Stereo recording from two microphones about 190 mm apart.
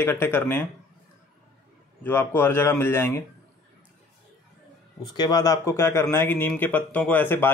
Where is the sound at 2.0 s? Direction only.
10° left (ahead or behind).